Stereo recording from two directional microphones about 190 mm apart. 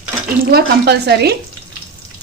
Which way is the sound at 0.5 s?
60° right (ahead or behind).